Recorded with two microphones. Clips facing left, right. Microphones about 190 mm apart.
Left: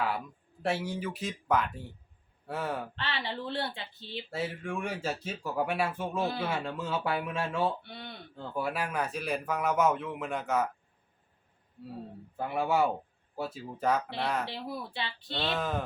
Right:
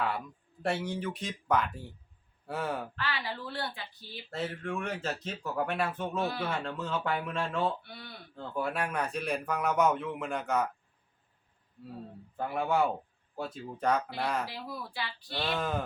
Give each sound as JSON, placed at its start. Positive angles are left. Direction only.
{"t": 0.6, "sound": "speech", "side_deg": 5}
{"t": 2.9, "sound": "speech", "side_deg": 25}
{"t": 4.3, "sound": "speech", "side_deg": 10}
{"t": 6.1, "sound": "speech", "side_deg": 25}
{"t": 6.7, "sound": "speech", "side_deg": 10}
{"t": 7.8, "sound": "speech", "side_deg": 25}
{"t": 8.5, "sound": "speech", "side_deg": 5}
{"t": 12.4, "sound": "speech", "side_deg": 5}
{"t": 14.4, "sound": "speech", "side_deg": 25}
{"t": 15.4, "sound": "speech", "side_deg": 0}